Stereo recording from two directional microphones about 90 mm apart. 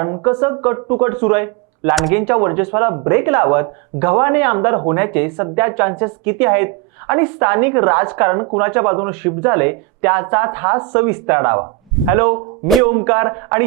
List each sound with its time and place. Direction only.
0.0 s speech: 25° right (ahead or behind)